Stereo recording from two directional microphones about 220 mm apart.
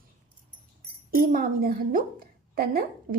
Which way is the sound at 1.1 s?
40° right (ahead or behind).